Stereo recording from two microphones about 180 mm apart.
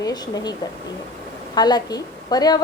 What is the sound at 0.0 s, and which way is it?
Speech, 20° left (ahead or behind).